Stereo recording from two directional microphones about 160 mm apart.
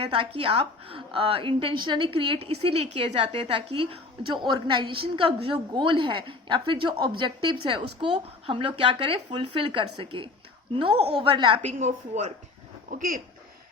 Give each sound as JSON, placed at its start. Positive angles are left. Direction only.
{"t": 0.0, "sound": "a woman's voice", "side_deg": -35}
{"t": 3.3, "sound": "a woman's voice", "side_deg": -30}
{"t": 11.6, "sound": "a woman's voice", "side_deg": -45}
{"t": 12.9, "sound": "speech", "side_deg": -60}